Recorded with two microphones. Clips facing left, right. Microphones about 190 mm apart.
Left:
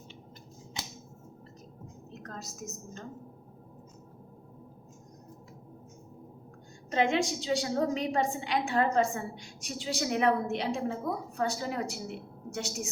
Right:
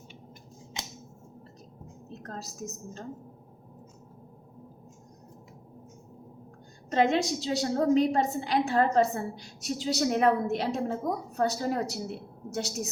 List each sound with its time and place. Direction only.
2.2 s a woman's voice: 35° right (ahead or behind)
6.9 s a woman's voice: 40° right (ahead or behind)